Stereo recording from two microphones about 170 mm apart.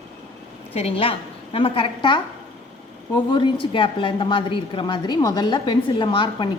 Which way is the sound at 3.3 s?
30° left (ahead or behind).